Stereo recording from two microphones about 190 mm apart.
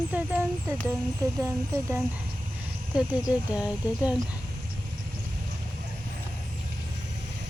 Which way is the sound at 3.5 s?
5° right (ahead or behind).